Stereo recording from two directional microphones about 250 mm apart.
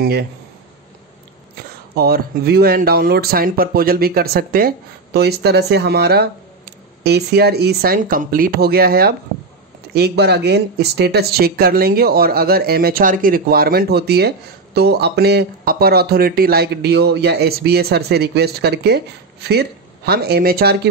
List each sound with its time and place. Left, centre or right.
0.0 s speech: right
2.0 s speech: right